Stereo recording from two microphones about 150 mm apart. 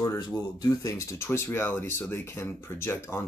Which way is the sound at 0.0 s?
20° left (ahead or behind).